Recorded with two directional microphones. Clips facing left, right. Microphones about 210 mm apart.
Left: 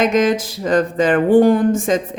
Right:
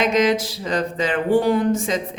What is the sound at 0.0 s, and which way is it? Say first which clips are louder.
Speech: left 3 dB; 50° left (ahead or behind).